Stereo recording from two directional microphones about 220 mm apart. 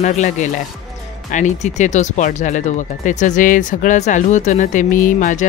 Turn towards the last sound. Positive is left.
turn(degrees=35)  # may be behind; listen again after turning